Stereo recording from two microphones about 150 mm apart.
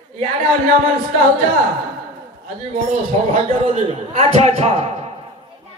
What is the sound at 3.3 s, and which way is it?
Speech, 45° right (ahead or behind).